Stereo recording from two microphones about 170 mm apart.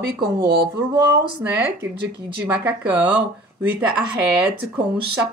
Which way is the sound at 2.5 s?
10° right (ahead or behind).